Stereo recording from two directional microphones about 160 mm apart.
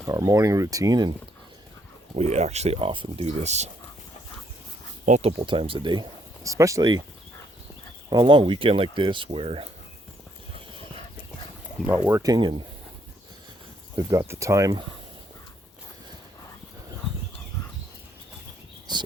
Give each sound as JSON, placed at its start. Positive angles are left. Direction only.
{"t": 0.0, "sound": "speech", "side_deg": -20}
{"t": 2.1, "sound": "speech", "side_deg": -40}
{"t": 5.0, "sound": "speech", "side_deg": -50}
{"t": 5.4, "sound": "speech", "side_deg": -30}
{"t": 8.1, "sound": "speech", "side_deg": -30}
{"t": 12.0, "sound": "speech", "side_deg": -20}
{"t": 13.9, "sound": "speech", "side_deg": -20}
{"t": 18.9, "sound": "a sound", "side_deg": -30}